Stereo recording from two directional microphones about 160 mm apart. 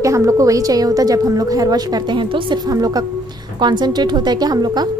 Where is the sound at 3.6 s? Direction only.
25° right (ahead or behind).